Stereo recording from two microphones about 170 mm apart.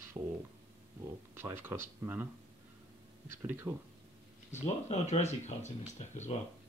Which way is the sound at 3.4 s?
15° right (ahead or behind).